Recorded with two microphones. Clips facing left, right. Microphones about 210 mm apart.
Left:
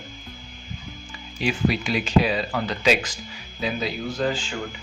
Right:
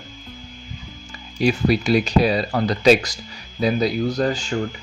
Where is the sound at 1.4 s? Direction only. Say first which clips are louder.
Right 5 dB; 40° right (ahead or behind).